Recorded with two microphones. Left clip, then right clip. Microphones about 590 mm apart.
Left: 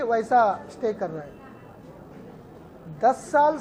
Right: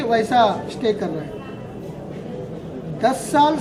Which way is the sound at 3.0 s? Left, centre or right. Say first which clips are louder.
Right 3 dB; left.